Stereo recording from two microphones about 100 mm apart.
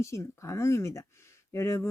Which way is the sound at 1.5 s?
30° left (ahead or behind).